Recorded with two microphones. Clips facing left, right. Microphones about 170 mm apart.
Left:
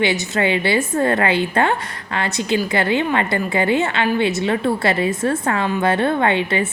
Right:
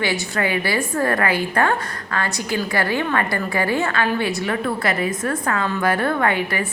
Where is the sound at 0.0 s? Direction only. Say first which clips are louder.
Left 4 dB; 20° left (ahead or behind).